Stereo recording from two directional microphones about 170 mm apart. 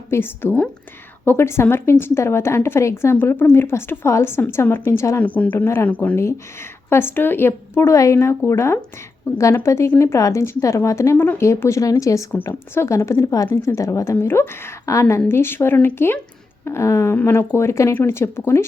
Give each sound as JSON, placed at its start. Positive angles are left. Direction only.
{"t": 0.1, "sound": "a woman's voice", "side_deg": 15}